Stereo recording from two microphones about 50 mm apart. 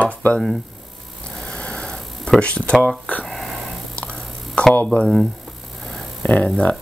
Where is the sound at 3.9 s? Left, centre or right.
Left.